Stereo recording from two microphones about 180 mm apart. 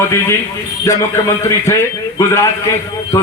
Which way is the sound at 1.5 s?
15° left (ahead or behind).